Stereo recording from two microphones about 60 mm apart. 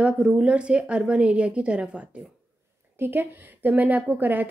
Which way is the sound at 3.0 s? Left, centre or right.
Right.